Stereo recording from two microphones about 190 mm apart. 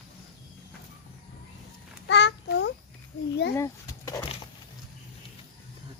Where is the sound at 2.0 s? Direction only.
65° left (ahead or behind).